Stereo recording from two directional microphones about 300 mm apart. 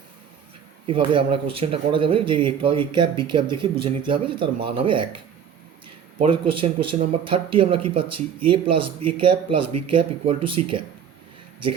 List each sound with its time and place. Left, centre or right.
0.9 s speech: centre